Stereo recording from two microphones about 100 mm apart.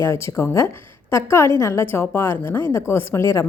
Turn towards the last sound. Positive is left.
turn(degrees=30)  # may be behind; listen again after turning